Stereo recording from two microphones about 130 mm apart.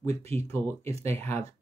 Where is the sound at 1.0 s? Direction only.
20° left (ahead or behind).